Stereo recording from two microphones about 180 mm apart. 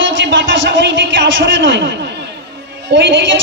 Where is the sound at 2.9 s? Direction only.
90° right.